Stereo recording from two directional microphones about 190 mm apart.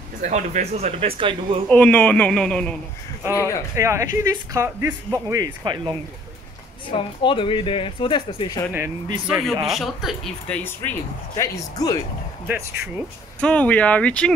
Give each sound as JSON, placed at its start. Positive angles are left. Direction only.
{"t": 0.2, "sound": "speech", "side_deg": -40}
{"t": 1.7, "sound": "speech", "side_deg": 5}
{"t": 3.3, "sound": "speech", "side_deg": 15}
{"t": 3.7, "sound": "speech", "side_deg": -15}
{"t": 6.9, "sound": "speech", "side_deg": 25}
{"t": 9.3, "sound": "speech", "side_deg": 0}
{"t": 10.6, "sound": "speech", "side_deg": 10}
{"t": 13.4, "sound": "speech", "side_deg": 5}